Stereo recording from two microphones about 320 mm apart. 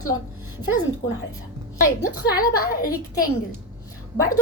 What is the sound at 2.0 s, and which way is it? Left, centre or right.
Speech, left.